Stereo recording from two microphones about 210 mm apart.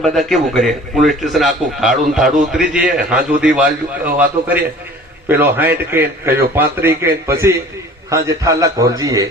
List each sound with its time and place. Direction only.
0.0 s a man's voice: centre (ahead or behind); by 9.2 s 15° right (ahead or behind)